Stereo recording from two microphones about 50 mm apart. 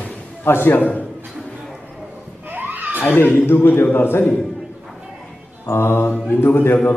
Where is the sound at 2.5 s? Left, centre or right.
Right.